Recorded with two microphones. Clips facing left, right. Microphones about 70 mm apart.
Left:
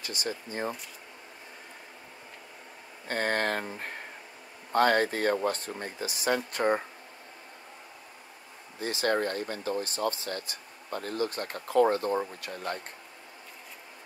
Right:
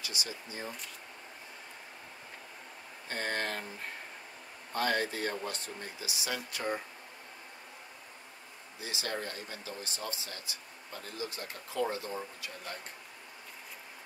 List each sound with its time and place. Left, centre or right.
0.0 s speech: left
3.1 s speech: left
8.7 s speech: left